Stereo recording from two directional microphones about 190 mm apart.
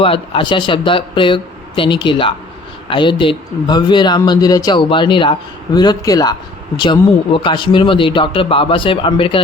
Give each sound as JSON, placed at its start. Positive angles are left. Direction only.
{"t": 0.0, "sound": "speech", "side_deg": 30}